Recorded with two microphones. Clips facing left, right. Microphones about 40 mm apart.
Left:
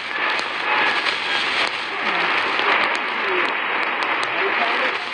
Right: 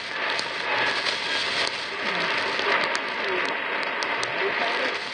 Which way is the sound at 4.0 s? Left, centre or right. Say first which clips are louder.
Left 5 dB; left.